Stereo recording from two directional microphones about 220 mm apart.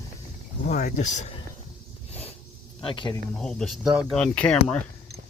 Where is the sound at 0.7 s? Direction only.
35° left (ahead or behind).